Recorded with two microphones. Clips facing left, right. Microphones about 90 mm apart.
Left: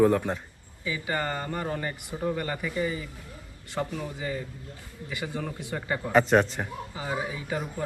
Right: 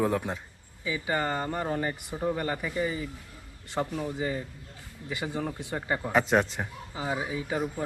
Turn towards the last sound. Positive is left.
turn(degrees=-20)  # may be behind; listen again after turning